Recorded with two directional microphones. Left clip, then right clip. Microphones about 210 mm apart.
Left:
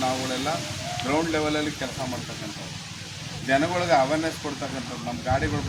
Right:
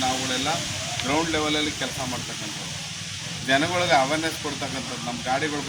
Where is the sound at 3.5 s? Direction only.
10° left (ahead or behind).